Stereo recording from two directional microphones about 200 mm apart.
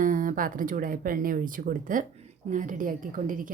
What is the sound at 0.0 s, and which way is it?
A woman's voice, 40° right (ahead or behind).